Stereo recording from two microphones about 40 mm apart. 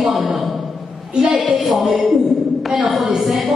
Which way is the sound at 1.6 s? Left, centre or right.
Centre.